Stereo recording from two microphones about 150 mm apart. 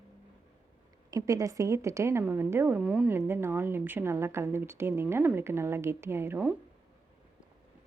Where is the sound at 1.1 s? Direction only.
20° right (ahead or behind); by 3.1 s 5° right (ahead or behind).